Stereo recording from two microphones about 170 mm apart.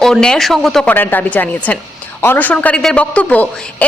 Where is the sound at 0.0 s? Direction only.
5° left (ahead or behind).